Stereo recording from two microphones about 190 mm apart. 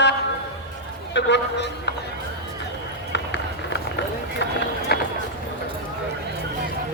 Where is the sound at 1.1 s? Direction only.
65° left (ahead or behind).